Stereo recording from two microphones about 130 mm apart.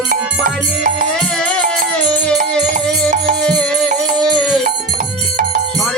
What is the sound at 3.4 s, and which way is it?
Music, 5° left (ahead or behind).